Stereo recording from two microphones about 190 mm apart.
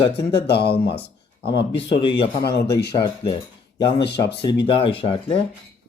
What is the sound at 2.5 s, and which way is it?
Speech, 60° left (ahead or behind).